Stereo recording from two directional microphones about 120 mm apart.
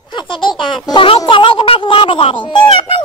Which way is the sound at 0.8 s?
45° left (ahead or behind).